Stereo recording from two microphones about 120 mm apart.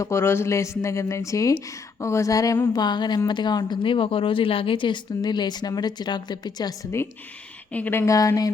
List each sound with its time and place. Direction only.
0.0 s speech: 20° left (ahead or behind)
7.7 s speech: 15° left (ahead or behind)